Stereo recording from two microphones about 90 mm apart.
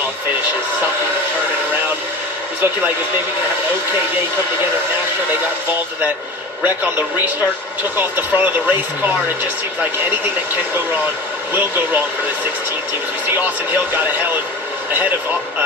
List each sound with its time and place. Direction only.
7.9 s speech: 20° right (ahead or behind)